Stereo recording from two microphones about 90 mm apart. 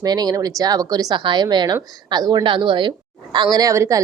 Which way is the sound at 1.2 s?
55° right (ahead or behind).